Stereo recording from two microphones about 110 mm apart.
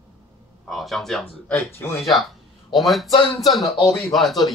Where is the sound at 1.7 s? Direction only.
25° left (ahead or behind).